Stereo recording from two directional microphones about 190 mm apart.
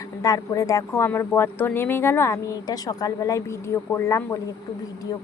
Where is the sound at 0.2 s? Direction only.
20° left (ahead or behind).